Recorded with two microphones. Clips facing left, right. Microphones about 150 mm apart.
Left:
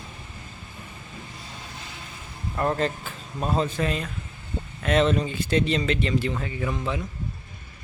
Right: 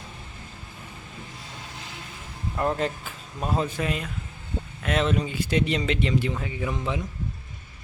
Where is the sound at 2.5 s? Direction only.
5° right (ahead or behind).